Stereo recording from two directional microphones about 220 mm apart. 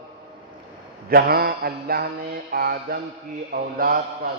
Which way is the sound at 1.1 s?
45° right (ahead or behind).